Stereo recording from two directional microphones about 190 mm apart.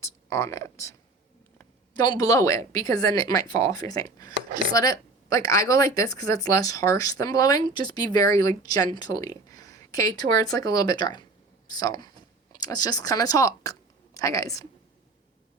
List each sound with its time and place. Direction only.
0.0 s speech: 15° left (ahead or behind)
2.0 s speech: 20° left (ahead or behind)